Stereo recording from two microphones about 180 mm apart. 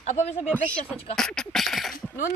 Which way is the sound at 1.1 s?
5° left (ahead or behind).